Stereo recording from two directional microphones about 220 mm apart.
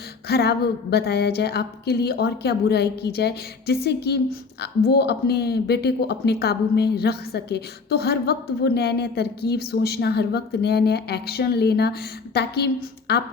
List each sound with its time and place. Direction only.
0.3 s a woman's voice: 45° left (ahead or behind)